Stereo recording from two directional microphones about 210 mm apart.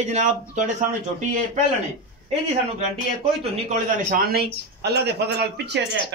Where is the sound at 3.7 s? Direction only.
40° right (ahead or behind).